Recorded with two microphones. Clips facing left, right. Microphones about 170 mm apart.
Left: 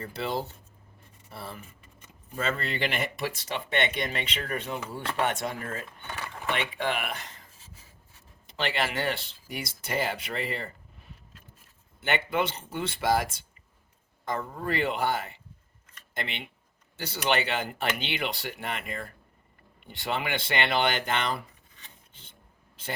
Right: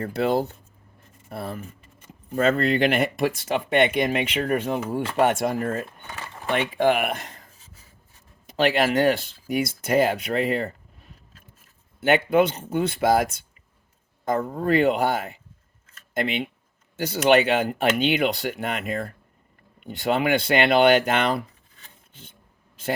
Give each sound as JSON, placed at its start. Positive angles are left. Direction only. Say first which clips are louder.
{"t": 0.0, "sound": "speech", "louder": "right 9 dB", "side_deg": -55}
{"t": 8.5, "sound": "speech", "louder": "right 10 dB", "side_deg": -50}
{"t": 11.9, "sound": "speech", "louder": "right 9 dB", "side_deg": -50}
{"t": 14.3, "sound": "speech", "louder": "right 9 dB", "side_deg": -45}